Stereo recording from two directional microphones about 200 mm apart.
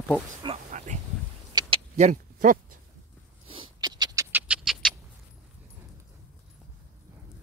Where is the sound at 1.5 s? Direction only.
25° right (ahead or behind).